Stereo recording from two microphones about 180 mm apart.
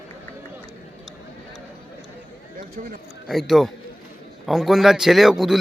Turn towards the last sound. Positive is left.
turn(degrees=0)  # may be behind; listen again after turning